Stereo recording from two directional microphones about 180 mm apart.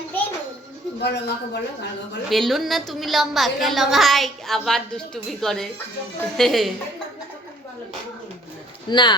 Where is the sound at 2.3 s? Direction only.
Centre (ahead or behind).